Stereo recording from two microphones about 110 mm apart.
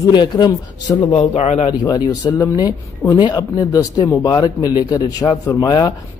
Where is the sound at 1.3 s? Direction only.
90° left.